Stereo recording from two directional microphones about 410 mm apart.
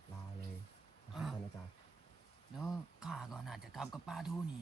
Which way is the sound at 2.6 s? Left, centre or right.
Centre.